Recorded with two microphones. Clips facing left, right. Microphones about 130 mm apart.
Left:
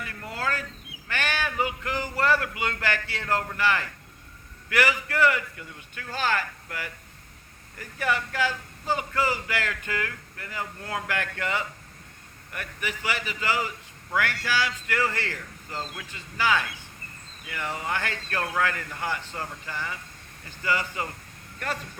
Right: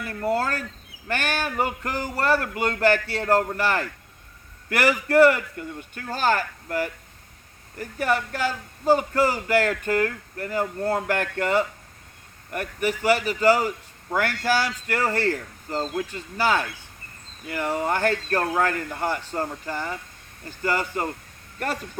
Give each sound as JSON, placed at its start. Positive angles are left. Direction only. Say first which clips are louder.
{"t": 0.1, "sound": "a man's voice", "louder": "right 8 dB", "side_deg": -45}